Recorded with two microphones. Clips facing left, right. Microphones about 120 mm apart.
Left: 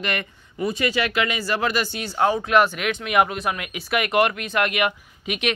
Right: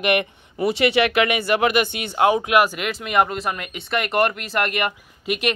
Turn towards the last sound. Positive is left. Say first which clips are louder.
# right 3 dB
turn(degrees=0)  # may be behind; listen again after turning